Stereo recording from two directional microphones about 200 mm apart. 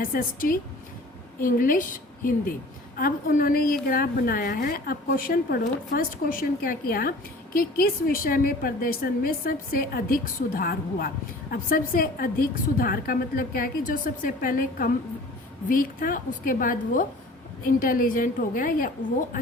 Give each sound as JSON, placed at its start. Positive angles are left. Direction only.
{"t": 0.0, "sound": "a woman's voice", "side_deg": 45}